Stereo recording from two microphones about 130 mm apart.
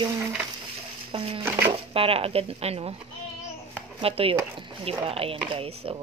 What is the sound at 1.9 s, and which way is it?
Speech, 45° right (ahead or behind).